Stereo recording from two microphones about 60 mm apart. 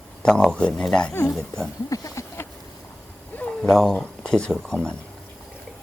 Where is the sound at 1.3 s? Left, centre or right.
Centre.